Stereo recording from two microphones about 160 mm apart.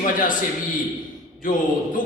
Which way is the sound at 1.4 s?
55° left (ahead or behind).